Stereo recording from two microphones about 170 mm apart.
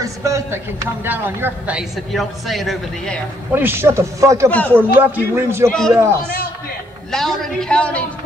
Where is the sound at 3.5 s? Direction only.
15° right (ahead or behind).